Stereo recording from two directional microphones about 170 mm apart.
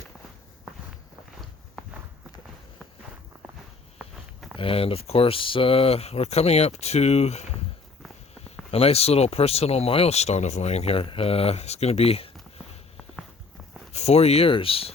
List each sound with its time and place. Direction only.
3.9 s walk: centre (ahead or behind)
4.5 s speech: 35° left (ahead or behind)
8.7 s speech: 35° left (ahead or behind)
13.9 s speech: 40° left (ahead or behind)